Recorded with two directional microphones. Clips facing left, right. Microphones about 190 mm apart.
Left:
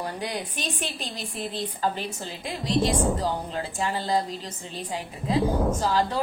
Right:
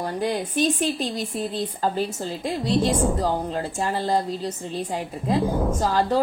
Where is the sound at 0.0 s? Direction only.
40° right (ahead or behind).